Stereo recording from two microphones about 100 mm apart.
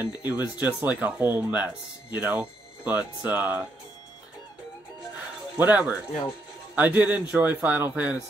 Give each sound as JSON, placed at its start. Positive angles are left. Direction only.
{"t": 0.1, "sound": "speech", "side_deg": -15}
{"t": 5.6, "sound": "speech", "side_deg": -15}